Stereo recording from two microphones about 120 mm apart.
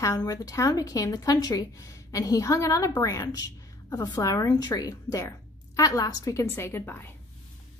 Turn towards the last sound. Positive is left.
turn(degrees=20)  # may be behind; listen again after turning